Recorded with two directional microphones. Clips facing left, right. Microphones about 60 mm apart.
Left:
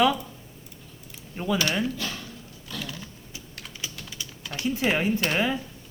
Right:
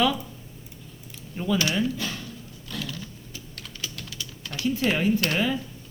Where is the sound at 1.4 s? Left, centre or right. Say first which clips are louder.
Right 1 dB; left.